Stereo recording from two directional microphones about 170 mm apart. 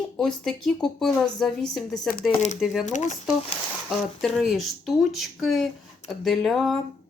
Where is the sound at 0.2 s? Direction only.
Centre (ahead or behind).